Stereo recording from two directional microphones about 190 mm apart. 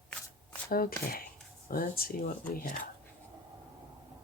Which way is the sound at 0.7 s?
50° left (ahead or behind).